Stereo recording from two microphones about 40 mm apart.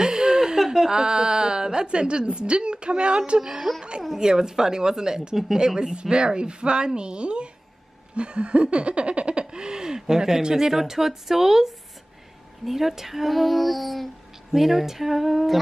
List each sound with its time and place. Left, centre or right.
0.0 s a sound: centre
0.7 s a woman's voice: centre
3.3 s laughter: centre
5.9 s a woman's voice: right
8.1 s laughter: right; by 11.7 s centre
12.6 s speech: centre